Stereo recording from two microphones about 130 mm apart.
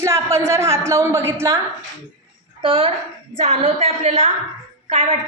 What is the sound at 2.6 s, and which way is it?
A woman's voice, 45° right (ahead or behind).